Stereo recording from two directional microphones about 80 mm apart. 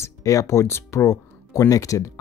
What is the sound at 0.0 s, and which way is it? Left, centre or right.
Speech, left.